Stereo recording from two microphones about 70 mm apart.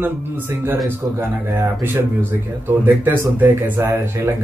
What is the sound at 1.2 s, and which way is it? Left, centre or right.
Speech, right.